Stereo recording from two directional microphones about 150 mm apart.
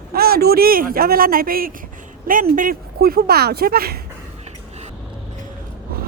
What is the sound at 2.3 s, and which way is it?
Speech, 65° right (ahead or behind).